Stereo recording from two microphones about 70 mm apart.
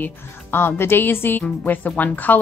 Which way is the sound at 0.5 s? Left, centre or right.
Left.